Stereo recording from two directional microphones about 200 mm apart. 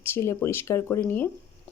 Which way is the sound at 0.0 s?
15° left (ahead or behind).